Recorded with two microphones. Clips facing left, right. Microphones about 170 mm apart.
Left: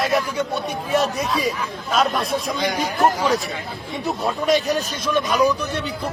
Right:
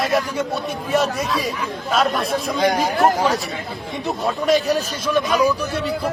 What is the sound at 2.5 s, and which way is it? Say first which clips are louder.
Speech: right 5 dB; 40° right (ahead or behind).